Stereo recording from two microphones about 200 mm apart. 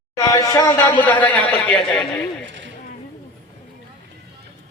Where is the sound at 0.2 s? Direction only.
15° left (ahead or behind).